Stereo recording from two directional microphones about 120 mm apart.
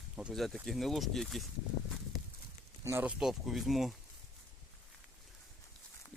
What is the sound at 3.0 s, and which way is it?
Speech, 5° right (ahead or behind).